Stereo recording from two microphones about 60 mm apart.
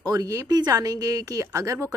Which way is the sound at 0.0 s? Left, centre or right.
Right.